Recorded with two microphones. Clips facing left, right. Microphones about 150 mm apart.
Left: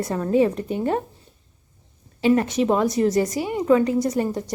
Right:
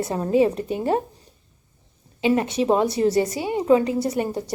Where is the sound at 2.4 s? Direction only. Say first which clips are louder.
Even; 30° right (ahead or behind).